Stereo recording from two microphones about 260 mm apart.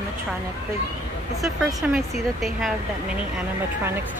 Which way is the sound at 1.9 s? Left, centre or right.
Centre.